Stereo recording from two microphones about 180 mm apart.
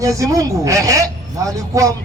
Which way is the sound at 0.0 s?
20° right (ahead or behind).